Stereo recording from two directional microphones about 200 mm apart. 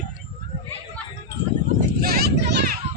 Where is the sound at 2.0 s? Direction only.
50° right (ahead or behind).